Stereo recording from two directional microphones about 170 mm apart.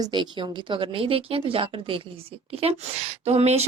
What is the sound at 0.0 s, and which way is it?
Speech, 25° right (ahead or behind).